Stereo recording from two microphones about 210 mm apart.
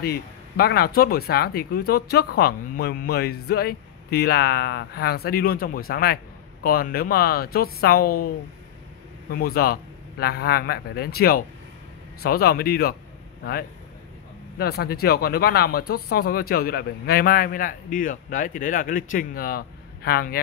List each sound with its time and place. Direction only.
0.0 s speech: 50° left (ahead or behind)
9.3 s speech: 45° left (ahead or behind)
14.6 s speech: 50° left (ahead or behind)